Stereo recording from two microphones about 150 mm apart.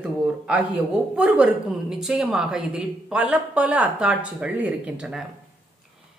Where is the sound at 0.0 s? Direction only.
10° right (ahead or behind).